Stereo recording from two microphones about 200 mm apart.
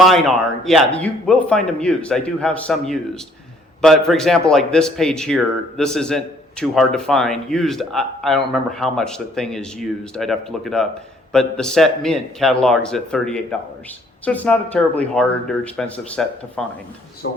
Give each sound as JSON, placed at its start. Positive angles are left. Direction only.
{"t": 0.0, "sound": "a man's voice", "side_deg": 0}
{"t": 17.2, "sound": "speech", "side_deg": 70}